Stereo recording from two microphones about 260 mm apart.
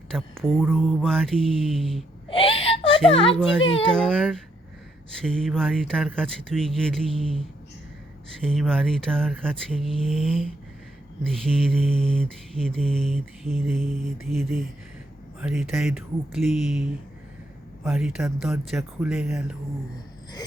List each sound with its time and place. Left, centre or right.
0.1 s mantra: centre
2.3 s whimper: left
3.9 s mantra: centre